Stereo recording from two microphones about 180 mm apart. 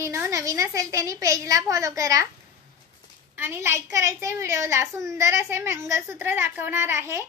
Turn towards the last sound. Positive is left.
turn(degrees=-15)  # may be behind; listen again after turning